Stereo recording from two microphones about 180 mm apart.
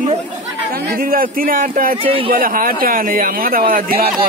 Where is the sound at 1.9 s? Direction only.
30° right (ahead or behind).